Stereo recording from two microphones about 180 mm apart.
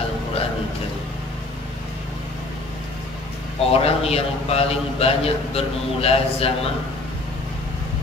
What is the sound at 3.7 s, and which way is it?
A man's voice, 35° left (ahead or behind).